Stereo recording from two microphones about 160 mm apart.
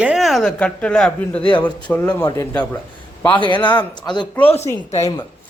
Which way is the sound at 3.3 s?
30° left (ahead or behind).